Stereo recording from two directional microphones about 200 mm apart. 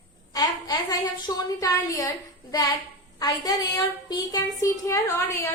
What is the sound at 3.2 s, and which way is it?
A woman's voice, 20° left (ahead or behind).